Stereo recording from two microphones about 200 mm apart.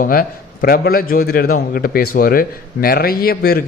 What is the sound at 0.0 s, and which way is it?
A man's voice, 45° left (ahead or behind).